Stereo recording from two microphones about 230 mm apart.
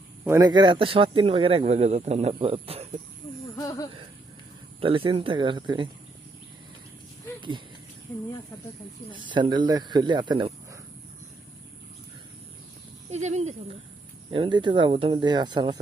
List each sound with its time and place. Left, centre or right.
0.3 s speech: centre
3.6 s a sound: centre
4.8 s speech: right
9.1 s speech: right
13.1 s speech: right